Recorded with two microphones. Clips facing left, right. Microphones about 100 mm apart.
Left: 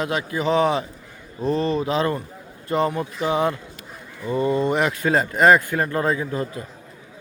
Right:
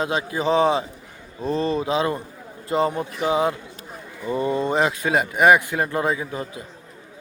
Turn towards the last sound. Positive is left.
turn(degrees=-15)  # may be behind; listen again after turning